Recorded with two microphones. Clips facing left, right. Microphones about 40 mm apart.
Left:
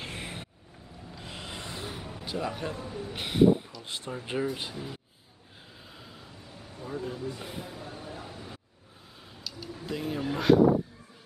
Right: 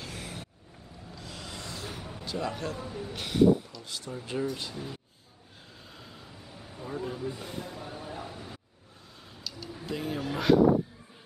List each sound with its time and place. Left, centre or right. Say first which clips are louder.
0.0 s vehicle: left 2 dB; left
1.1 s a sound: left 2 dB; left
2.3 s a man's voice: even; centre
2.8 s speech: even; centre
3.1 s speech: left 1 dB; left
4.7 s speech: even; centre
5.9 s a sound: right 1 dB; centre
7.3 s a man's voice: right 1 dB; centre
7.8 s a sound: right 2 dB; centre
10.3 s speech: left 1 dB; centre